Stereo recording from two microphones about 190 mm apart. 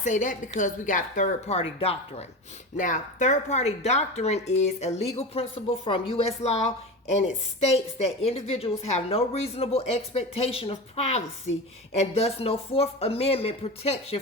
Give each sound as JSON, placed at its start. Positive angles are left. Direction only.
{"t": 0.0, "sound": "speech", "side_deg": 40}
{"t": 2.7, "sound": "speech", "side_deg": 45}